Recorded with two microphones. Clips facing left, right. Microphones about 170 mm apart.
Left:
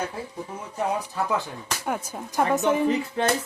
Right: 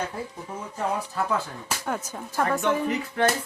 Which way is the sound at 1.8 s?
10° left (ahead or behind).